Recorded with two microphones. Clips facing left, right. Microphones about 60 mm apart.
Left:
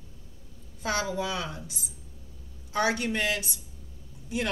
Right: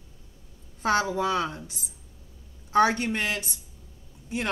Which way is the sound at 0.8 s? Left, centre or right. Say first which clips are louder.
Right 5 dB; right.